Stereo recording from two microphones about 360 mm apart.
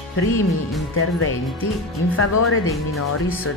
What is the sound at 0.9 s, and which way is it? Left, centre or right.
Speech, left.